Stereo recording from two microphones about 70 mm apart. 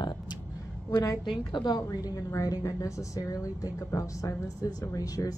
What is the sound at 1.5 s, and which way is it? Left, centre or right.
Speech, left.